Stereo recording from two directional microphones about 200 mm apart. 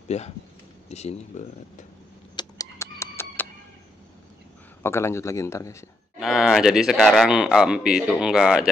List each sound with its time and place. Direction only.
0.1 s speech: 35° left (ahead or behind)
2.3 s chicken: 15° left (ahead or behind)
4.8 s speech: 15° left (ahead or behind)
6.1 s a man's voice: centre (ahead or behind)